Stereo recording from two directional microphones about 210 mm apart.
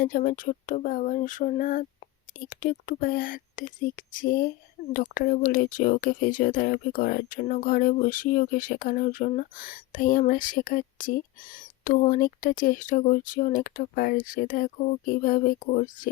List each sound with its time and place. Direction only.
0.0 s speech: 40° left (ahead or behind)